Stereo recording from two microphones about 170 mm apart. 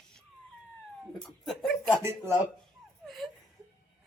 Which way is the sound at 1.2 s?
Centre (ahead or behind).